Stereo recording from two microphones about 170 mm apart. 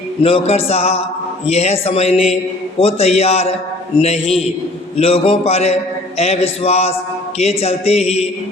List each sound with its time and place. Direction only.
0.2 s a man's voice: 35° left (ahead or behind)